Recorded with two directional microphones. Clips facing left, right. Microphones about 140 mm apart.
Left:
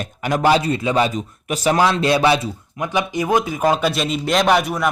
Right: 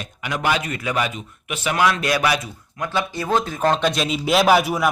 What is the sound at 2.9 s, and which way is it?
Speech, 15° left (ahead or behind).